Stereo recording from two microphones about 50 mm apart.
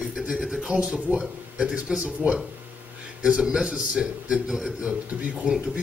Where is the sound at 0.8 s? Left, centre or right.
Right.